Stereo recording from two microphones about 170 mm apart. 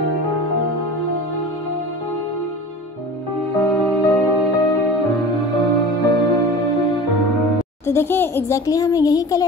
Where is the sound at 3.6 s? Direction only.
10° left (ahead or behind).